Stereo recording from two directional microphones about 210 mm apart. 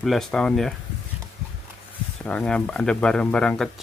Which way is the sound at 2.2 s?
5° left (ahead or behind).